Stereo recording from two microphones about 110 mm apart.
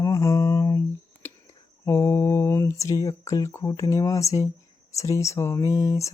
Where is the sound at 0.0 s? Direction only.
30° left (ahead or behind).